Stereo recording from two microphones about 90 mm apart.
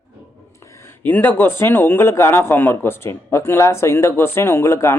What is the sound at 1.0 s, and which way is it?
A man's voice, 20° left (ahead or behind).